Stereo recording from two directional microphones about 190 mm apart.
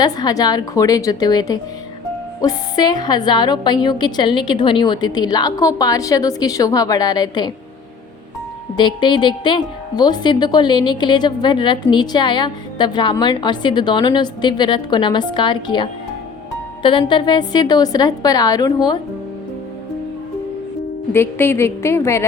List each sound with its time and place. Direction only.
0.0 s a woman's voice: 20° left (ahead or behind)
8.7 s a woman's voice: 25° left (ahead or behind)
21.1 s a woman's voice: 10° left (ahead or behind)